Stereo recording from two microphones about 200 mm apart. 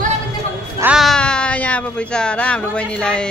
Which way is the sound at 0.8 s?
5° right (ahead or behind).